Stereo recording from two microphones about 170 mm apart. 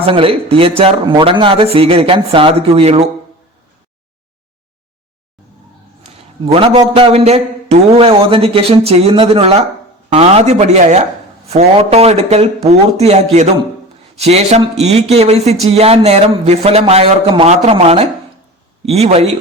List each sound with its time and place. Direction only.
0.0 s a man's voice: 35° right (ahead or behind)
6.4 s a man's voice: 35° right (ahead or behind)